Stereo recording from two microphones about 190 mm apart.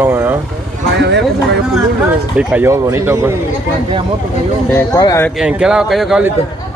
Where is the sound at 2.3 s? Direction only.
10° right (ahead or behind).